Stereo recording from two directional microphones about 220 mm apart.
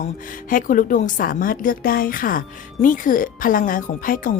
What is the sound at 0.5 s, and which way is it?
A woman's voice, 40° left (ahead or behind).